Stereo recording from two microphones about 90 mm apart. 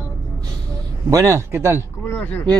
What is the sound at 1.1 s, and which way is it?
Speech, 35° right (ahead or behind).